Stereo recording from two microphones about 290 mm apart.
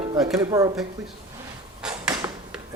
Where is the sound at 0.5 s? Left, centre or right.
Centre.